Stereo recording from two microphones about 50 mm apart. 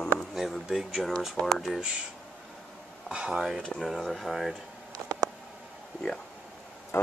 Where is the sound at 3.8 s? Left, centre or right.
Centre.